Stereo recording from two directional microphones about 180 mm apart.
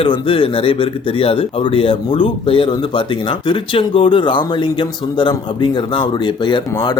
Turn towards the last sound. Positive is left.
turn(degrees=20)  # may be behind; listen again after turning